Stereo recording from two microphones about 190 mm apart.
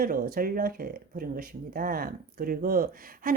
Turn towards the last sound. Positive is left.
turn(degrees=-50)  # may be behind; listen again after turning